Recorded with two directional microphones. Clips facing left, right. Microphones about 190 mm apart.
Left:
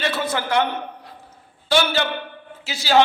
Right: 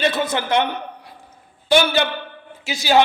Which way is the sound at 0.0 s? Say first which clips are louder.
Right 3 dB; 20° right (ahead or behind).